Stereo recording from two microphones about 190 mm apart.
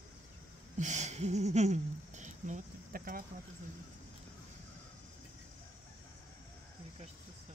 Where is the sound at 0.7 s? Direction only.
40° right (ahead or behind).